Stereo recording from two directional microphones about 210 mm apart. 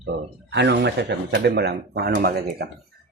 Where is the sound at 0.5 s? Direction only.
55° right (ahead or behind).